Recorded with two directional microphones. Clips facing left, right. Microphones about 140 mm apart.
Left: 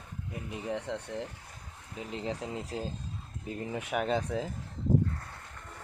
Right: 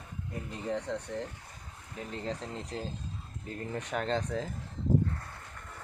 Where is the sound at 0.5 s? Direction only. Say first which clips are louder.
Right 1 dB; 10° left (ahead or behind).